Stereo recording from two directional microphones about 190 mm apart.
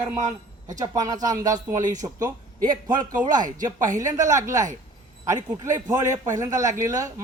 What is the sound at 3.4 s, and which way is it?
Speech, 45° right (ahead or behind).